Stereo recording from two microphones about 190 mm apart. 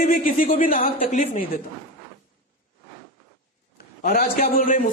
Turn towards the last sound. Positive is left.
turn(degrees=45)  # may be behind; listen again after turning